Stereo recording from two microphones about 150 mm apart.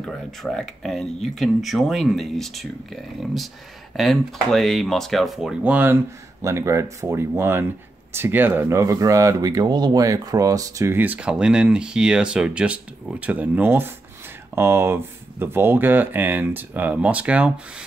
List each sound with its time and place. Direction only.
0.0 s speech: centre (ahead or behind)